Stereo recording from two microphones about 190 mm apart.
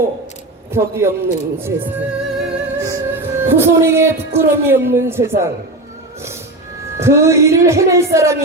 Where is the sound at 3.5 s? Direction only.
15° right (ahead or behind).